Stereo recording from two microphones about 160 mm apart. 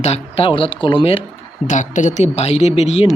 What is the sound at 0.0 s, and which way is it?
Speech, 40° left (ahead or behind).